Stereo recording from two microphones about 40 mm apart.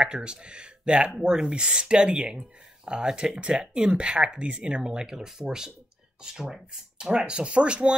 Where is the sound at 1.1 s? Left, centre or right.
Centre; by 4.8 s right.